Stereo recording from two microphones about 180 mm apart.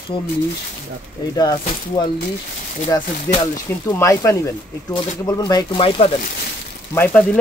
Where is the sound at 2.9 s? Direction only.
20° left (ahead or behind).